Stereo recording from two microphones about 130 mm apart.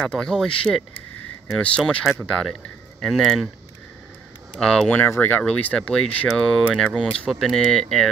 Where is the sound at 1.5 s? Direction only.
5° left (ahead or behind).